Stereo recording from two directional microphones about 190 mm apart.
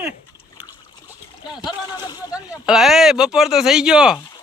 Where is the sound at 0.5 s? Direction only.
10° right (ahead or behind).